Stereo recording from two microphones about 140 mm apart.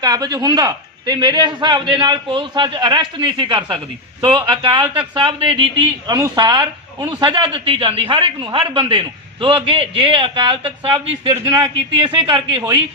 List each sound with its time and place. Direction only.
0.0 s speech: 30° right (ahead or behind)